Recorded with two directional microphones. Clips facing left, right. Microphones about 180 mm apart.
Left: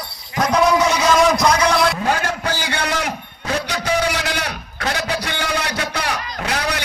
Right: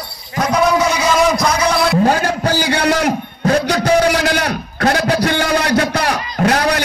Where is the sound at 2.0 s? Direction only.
40° right (ahead or behind).